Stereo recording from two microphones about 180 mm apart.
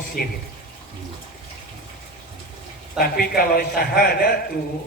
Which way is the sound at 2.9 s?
55° left (ahead or behind).